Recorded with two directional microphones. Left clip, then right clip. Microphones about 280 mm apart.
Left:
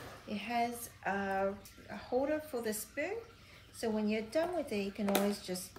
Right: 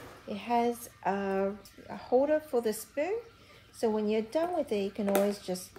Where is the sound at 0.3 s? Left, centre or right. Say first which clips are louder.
Right 4 dB; right.